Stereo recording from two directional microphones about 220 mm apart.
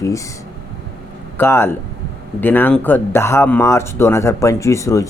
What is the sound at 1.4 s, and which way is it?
A man's voice, 10° left (ahead or behind).